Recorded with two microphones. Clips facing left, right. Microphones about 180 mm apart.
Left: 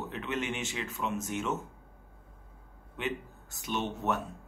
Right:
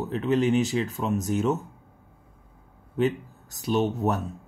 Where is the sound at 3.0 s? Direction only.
40° right (ahead or behind).